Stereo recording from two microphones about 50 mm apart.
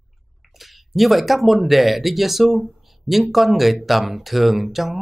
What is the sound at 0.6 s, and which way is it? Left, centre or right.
Speech, centre.